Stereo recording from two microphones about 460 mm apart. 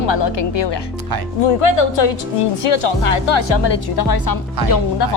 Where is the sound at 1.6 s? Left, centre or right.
Left.